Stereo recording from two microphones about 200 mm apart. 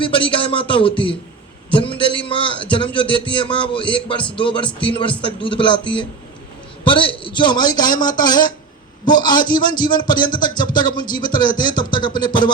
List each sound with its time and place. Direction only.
0.0 s a man's voice: 25° left (ahead or behind)
6.8 s a man's voice: 25° left (ahead or behind)